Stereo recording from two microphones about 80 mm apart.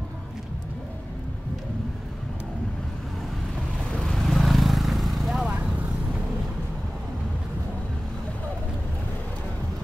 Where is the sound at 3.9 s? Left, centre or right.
Centre.